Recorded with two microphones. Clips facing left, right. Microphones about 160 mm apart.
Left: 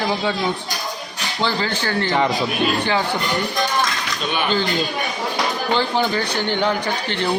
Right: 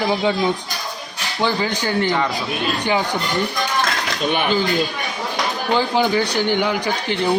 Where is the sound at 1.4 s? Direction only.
15° right (ahead or behind).